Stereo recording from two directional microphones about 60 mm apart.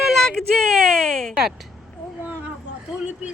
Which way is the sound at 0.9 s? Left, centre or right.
Centre.